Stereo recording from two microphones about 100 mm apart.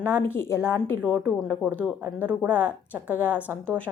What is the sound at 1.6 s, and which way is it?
Speech, centre (ahead or behind).